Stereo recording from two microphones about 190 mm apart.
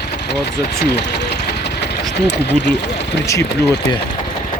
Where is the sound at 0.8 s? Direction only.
60° left (ahead or behind).